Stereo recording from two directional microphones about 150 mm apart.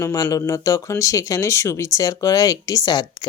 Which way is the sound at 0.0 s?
25° left (ahead or behind).